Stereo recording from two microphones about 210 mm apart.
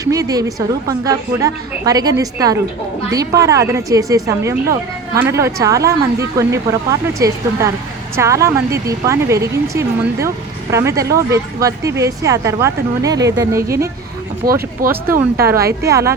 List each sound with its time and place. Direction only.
0.0 s speech: 15° right (ahead or behind)
14.4 s speech: 45° right (ahead or behind)
14.8 s speech: 10° right (ahead or behind)